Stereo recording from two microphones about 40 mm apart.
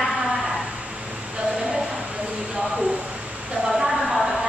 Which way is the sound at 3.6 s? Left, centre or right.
Centre.